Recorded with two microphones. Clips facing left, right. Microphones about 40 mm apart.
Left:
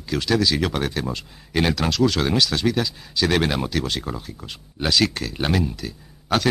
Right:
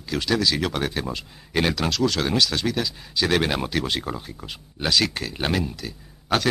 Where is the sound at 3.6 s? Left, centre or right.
Centre.